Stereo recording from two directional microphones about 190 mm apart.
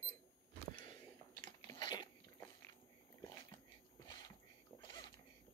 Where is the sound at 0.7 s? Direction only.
25° left (ahead or behind).